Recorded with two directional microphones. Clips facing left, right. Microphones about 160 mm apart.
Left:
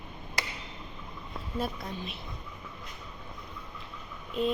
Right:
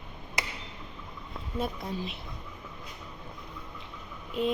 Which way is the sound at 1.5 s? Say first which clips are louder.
Right 2 dB; 20° right (ahead or behind).